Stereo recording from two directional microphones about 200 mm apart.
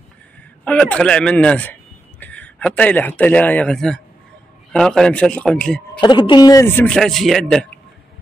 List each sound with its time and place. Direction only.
0.7 s a man's voice: 5° left (ahead or behind)
5.9 s speech: 20° left (ahead or behind); by 7.6 s centre (ahead or behind)